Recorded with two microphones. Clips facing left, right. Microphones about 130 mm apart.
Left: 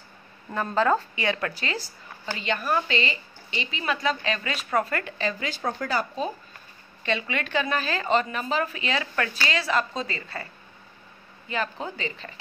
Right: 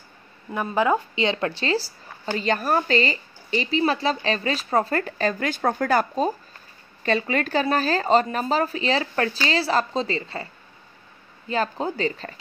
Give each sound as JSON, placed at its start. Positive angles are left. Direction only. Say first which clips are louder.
{"t": 0.5, "sound": "speech", "louder": "right 1 dB", "side_deg": -10}
{"t": 2.3, "sound": "speech", "louder": "right 4 dB", "side_deg": -40}
{"t": 5.2, "sound": "speech", "louder": "right 6 dB", "side_deg": -50}